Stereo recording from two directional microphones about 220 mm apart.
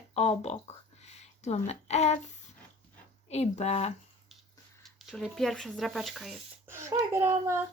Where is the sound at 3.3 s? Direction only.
30° left (ahead or behind).